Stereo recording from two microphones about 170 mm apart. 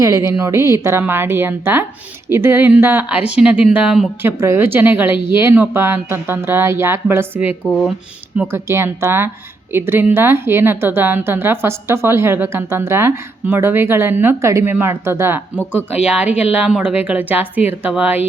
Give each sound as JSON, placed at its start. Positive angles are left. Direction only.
{"t": 0.0, "sound": "a woman's voice", "side_deg": -20}
{"t": 7.7, "sound": "speech", "side_deg": 5}
{"t": 8.4, "sound": "a woman's voice", "side_deg": -15}